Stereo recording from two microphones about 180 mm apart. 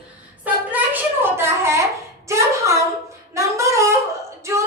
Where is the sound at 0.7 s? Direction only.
15° right (ahead or behind).